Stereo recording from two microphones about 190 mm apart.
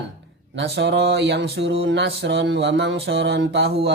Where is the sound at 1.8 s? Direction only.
65° right (ahead or behind).